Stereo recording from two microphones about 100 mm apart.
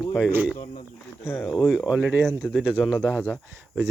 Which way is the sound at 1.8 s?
10° right (ahead or behind).